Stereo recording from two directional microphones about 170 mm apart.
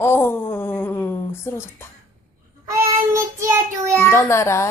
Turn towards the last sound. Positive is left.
turn(degrees=15)  # may be behind; listen again after turning